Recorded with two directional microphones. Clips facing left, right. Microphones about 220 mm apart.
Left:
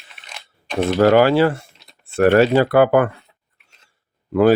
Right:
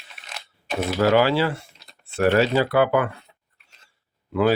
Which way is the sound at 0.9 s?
50° left (ahead or behind).